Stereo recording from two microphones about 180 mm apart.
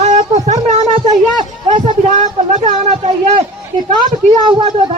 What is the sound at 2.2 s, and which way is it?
Speech, 40° right (ahead or behind).